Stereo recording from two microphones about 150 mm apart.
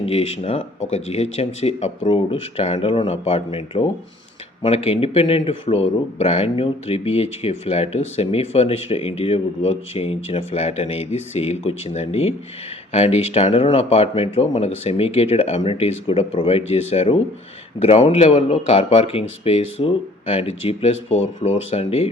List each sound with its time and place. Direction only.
0.0 s speech: 40° left (ahead or behind)